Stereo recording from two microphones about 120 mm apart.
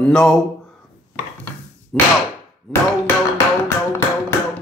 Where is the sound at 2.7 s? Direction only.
20° left (ahead or behind).